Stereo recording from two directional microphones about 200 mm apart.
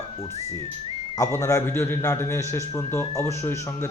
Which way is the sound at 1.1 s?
15° left (ahead or behind).